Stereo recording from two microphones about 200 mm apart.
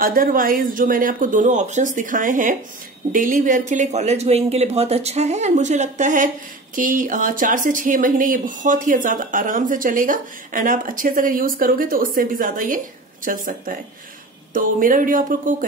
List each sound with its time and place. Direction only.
0.0 s speech: 45° right (ahead or behind)